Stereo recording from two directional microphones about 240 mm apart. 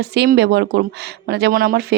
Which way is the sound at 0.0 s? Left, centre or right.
Right.